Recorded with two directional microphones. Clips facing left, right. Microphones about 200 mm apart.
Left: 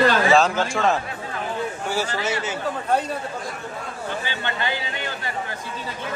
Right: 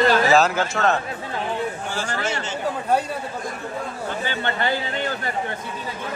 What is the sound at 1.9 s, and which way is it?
Speech, 10° left (ahead or behind).